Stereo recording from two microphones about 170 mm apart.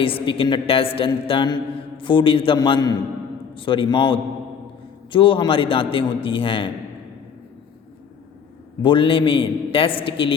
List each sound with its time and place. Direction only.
0.0 s a man's voice: 30° left (ahead or behind)
8.8 s a man's voice: 30° left (ahead or behind)